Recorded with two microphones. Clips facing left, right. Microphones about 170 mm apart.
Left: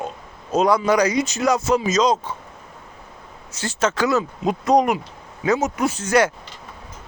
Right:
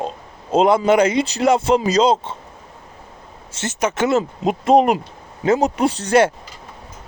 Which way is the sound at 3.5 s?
25° right (ahead or behind).